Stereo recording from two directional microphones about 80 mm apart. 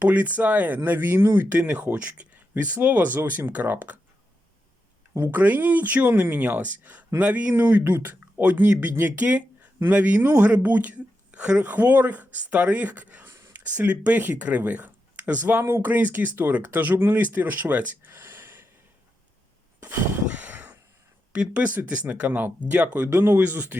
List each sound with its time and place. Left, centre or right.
0.0 s speech: centre
5.2 s a woman's voice: right
20.2 s a sound: right
21.3 s speech: centre
23.0 s speech: right